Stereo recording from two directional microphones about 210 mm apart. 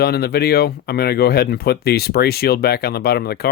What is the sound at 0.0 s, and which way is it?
Speech, 50° left (ahead or behind).